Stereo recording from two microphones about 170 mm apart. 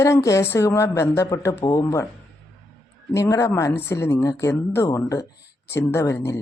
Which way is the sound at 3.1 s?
15° left (ahead or behind).